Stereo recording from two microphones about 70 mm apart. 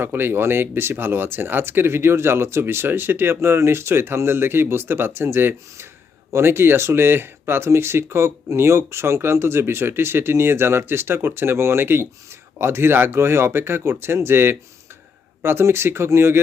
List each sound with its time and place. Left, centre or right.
0.0 s speech: right